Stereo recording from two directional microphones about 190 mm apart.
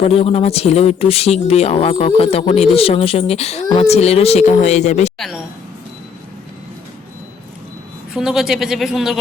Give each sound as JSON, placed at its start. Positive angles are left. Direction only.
{"t": 0.0, "sound": "speech", "side_deg": 30}
{"t": 5.1, "sound": "a woman's voice", "side_deg": 0}
{"t": 8.1, "sound": "speech", "side_deg": 0}